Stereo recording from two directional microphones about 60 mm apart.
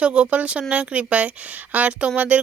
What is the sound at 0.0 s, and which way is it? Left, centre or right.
Speech, centre.